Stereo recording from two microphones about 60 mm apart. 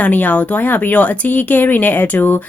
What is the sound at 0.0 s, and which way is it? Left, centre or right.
Speech, left.